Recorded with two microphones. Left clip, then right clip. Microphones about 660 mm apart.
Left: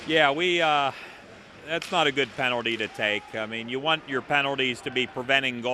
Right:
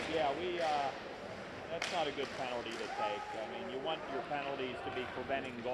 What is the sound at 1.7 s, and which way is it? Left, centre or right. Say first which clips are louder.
Speech: left 13 dB; left.